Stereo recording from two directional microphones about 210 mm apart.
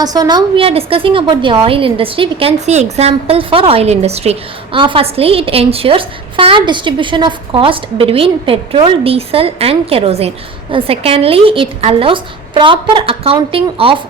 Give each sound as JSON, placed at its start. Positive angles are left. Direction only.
{"t": 0.0, "sound": "a woman's voice", "side_deg": -20}